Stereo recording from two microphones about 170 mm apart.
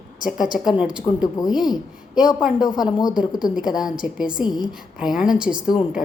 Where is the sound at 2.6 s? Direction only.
25° left (ahead or behind).